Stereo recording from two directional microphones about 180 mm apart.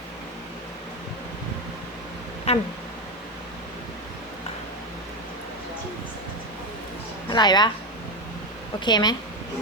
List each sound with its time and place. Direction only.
2.5 s a sound: 35° left (ahead or behind)
7.3 s a woman's voice: 25° left (ahead or behind)
8.8 s a woman's voice: 25° left (ahead or behind)